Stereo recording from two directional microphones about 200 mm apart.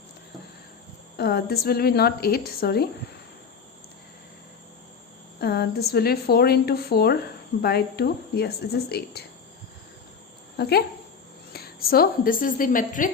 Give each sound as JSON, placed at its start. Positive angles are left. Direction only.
{"t": 1.1, "sound": "speech", "side_deg": 50}
{"t": 5.4, "sound": "speech", "side_deg": 55}
{"t": 10.6, "sound": "a woman's voice", "side_deg": 55}